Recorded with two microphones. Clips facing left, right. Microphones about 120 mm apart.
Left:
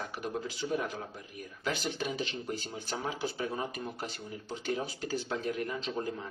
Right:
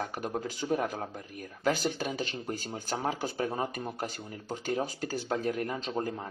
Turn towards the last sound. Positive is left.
turn(degrees=-45)  # may be behind; listen again after turning